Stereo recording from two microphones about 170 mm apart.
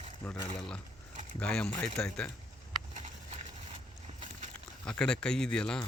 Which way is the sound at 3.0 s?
45° right (ahead or behind).